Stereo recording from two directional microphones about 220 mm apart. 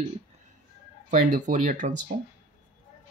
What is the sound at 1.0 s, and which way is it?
Speech, 35° right (ahead or behind).